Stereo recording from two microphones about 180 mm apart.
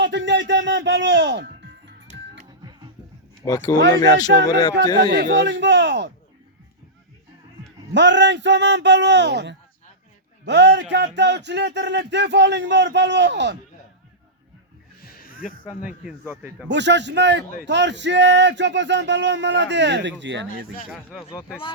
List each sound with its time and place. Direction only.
0.0 s music: 80° right
2.1 s music: 40° right (ahead or behind)
3.4 s speech: 20° left (ahead or behind)
4.9 s speech: 65° right (ahead or behind)
7.9 s speech: 80° right
15.0 s a sound: 55° left (ahead or behind)
16.0 s speech: 10° right (ahead or behind)
16.6 s speech: 75° right (ahead or behind)
20.9 s speech: 5° right (ahead or behind)